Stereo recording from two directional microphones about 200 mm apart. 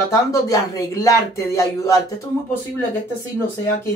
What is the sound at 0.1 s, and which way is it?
Speech, 15° left (ahead or behind).